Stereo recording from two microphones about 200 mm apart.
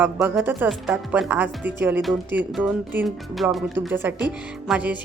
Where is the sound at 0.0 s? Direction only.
10° right (ahead or behind).